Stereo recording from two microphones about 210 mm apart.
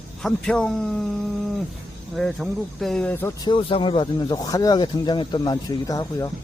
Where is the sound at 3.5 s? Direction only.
25° left (ahead or behind).